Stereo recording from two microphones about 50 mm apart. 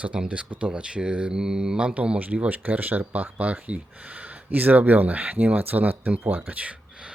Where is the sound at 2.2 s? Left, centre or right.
Right.